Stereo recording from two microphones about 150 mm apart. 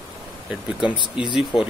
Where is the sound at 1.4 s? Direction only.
5° right (ahead or behind).